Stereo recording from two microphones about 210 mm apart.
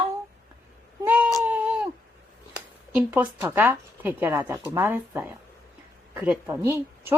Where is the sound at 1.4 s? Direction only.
10° right (ahead or behind).